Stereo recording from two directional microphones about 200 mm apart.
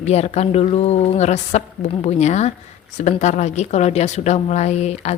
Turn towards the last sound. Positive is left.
turn(degrees=35)  # may be behind; listen again after turning